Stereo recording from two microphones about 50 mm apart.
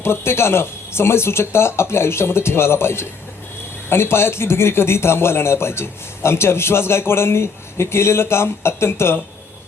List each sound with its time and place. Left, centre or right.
0.0 s a man's voice: left